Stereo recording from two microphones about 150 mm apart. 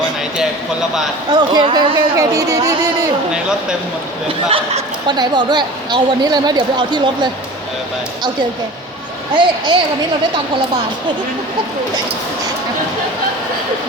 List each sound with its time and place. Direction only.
1.3 s a woman's voice: 25° right (ahead or behind)
4.4 s speech: 45° right (ahead or behind)
5.0 s a woman's voice: 30° right (ahead or behind)
9.3 s a woman's voice: 30° right (ahead or behind)